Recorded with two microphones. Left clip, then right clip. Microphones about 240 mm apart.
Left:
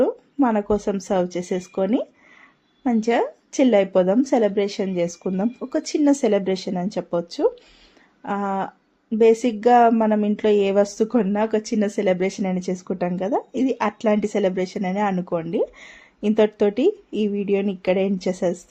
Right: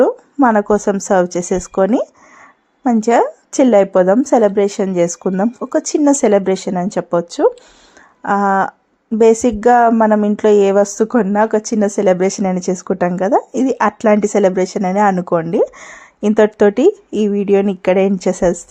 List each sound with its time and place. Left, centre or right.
0.0 s speech: right